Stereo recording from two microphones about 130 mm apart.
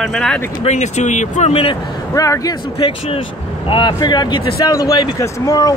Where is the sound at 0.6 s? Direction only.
60° left (ahead or behind).